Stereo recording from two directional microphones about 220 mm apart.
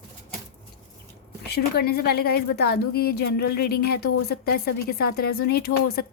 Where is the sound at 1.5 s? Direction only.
45° left (ahead or behind).